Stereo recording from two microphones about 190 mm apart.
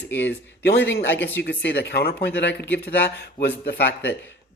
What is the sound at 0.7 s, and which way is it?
Speech, 60° left (ahead or behind).